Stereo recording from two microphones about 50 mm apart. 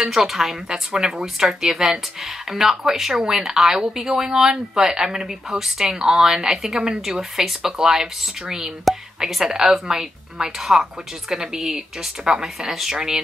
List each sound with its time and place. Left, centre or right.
0.0 s speech: centre